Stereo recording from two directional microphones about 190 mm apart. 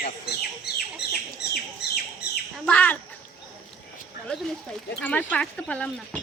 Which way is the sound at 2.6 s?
10° left (ahead or behind).